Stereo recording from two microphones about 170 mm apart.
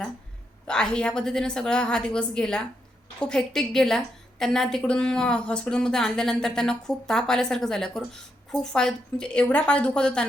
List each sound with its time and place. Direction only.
0.7 s a woman's voice: 5° left (ahead or behind)